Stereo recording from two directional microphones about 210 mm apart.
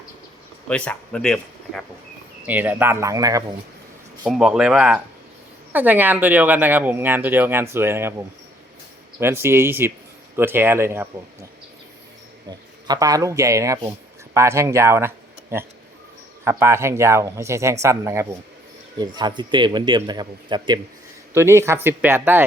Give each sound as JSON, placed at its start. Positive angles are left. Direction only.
{"t": 0.7, "sound": "speech", "side_deg": 5}
{"t": 2.5, "sound": "speech", "side_deg": -10}
{"t": 4.2, "sound": "speech", "side_deg": -5}
{"t": 9.1, "sound": "speech", "side_deg": -10}
{"t": 12.5, "sound": "a man's voice", "side_deg": -20}